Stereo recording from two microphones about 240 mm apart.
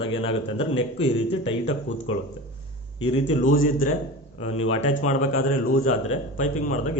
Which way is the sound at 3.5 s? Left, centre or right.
Left.